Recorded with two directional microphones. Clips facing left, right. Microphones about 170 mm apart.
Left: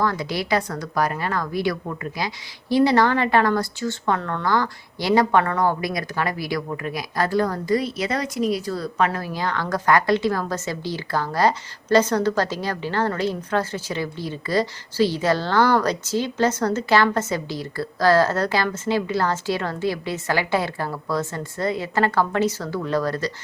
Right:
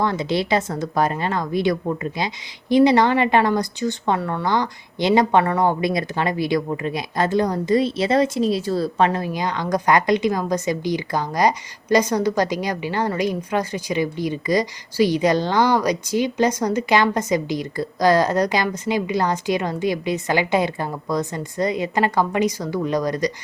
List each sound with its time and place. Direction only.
0.0 s speech: 25° right (ahead or behind)